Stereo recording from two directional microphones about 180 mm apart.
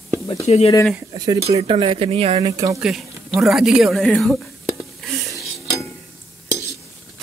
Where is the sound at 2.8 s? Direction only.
Centre (ahead or behind).